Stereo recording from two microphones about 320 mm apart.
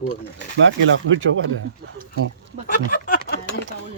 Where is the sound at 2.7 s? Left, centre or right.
Left.